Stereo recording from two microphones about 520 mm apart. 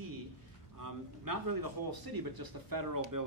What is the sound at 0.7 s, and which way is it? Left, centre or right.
A man's voice, right.